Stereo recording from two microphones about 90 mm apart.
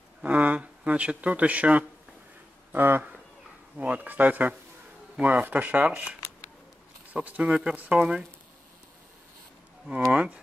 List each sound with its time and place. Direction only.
0.2 s speech: 15° right (ahead or behind)
10.1 s speech: 10° right (ahead or behind)